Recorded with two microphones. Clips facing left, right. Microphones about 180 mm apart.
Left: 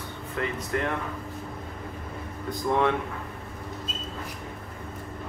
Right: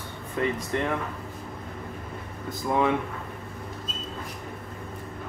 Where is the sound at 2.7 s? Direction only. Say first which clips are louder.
Even; 10° right (ahead or behind).